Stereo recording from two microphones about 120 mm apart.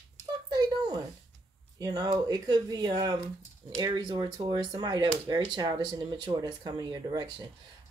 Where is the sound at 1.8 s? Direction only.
35° right (ahead or behind).